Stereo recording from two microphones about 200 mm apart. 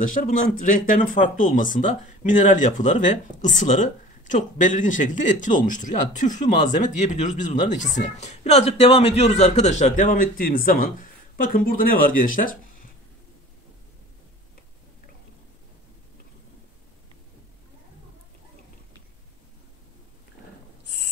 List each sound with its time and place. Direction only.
0.0 s speech: 40° left (ahead or behind)